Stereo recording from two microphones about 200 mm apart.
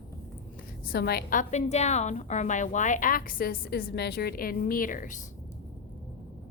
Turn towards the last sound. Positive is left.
turn(degrees=40)  # may be behind; listen again after turning